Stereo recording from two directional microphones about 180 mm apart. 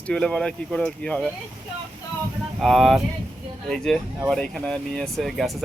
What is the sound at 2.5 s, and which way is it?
Speech, centre (ahead or behind).